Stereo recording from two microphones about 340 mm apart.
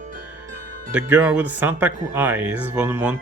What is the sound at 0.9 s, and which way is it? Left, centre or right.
Speech, centre.